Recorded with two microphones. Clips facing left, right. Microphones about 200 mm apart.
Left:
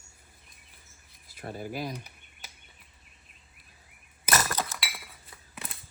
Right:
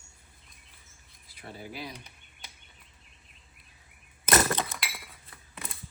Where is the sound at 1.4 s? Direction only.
45° left (ahead or behind).